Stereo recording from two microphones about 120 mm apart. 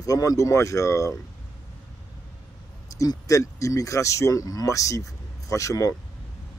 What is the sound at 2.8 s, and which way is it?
Speech, 25° left (ahead or behind).